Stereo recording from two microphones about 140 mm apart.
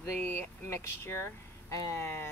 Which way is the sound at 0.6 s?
15° left (ahead or behind).